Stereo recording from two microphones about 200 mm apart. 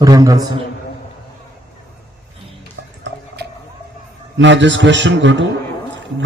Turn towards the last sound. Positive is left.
turn(degrees=-65)  # may be behind; listen again after turning